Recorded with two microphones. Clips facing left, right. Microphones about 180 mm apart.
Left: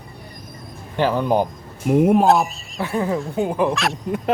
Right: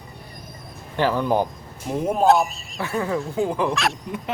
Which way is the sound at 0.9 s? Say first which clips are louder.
Left 2 dB; 15° left (ahead or behind).